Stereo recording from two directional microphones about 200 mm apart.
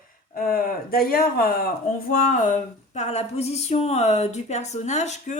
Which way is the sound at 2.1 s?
40° left (ahead or behind).